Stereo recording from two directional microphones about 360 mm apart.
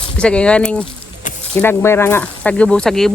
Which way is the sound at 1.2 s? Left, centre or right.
Left.